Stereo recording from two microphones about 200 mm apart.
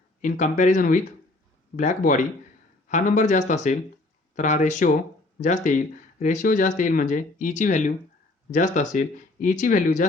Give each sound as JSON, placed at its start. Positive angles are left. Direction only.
{"t": 0.2, "sound": "speech", "side_deg": 40}